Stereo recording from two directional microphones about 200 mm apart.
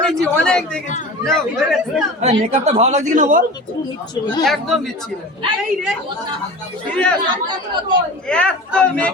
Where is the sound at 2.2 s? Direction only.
35° right (ahead or behind).